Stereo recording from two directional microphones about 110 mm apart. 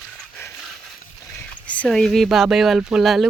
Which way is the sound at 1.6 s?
10° left (ahead or behind).